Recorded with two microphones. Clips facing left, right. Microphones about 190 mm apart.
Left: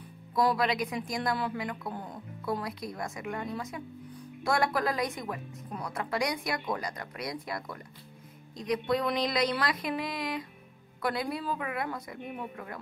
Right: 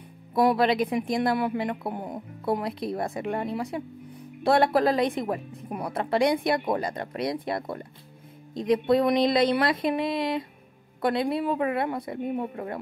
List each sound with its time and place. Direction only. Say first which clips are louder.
0.3 s speech: right 6 dB; 25° right (ahead or behind)